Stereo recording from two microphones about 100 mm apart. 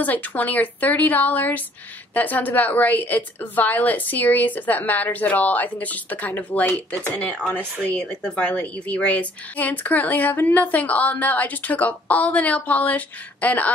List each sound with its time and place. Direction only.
0.0 s a woman's voice: 15° left (ahead or behind)